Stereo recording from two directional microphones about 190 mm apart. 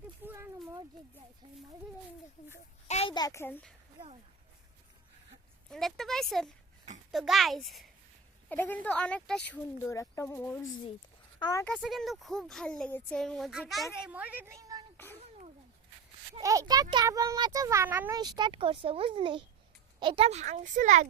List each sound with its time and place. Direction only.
0.3 s a sound: 10° right (ahead or behind)
2.8 s a child's voice: 35° left (ahead or behind); by 3.8 s 5° left (ahead or behind)
5.7 s speech: centre (ahead or behind)
9.5 s speech: 15° left (ahead or behind)
11.3 s speech: 20° left (ahead or behind)
11.6 s speech: centre (ahead or behind); by 14.8 s 20° right (ahead or behind)
14.9 s a sound: 10° left (ahead or behind)
16.4 s a child's voice: 15° right (ahead or behind); by 21.1 s 40° right (ahead or behind)